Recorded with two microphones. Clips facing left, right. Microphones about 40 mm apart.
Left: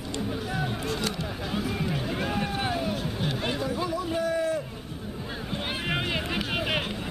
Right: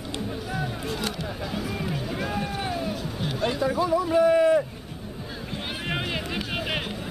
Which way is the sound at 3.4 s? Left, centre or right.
Centre.